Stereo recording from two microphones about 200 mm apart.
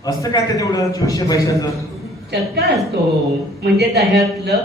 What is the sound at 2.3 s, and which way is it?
A woman's voice, 55° right (ahead or behind).